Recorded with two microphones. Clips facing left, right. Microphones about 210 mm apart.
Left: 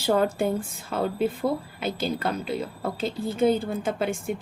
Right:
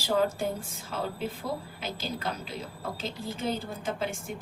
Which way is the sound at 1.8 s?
60° left (ahead or behind).